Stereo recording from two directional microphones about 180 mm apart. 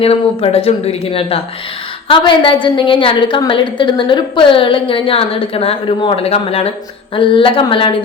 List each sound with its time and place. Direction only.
0.0 s a woman's voice: 35° left (ahead or behind)